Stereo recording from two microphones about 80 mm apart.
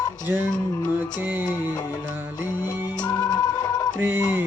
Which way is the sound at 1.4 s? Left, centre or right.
Left.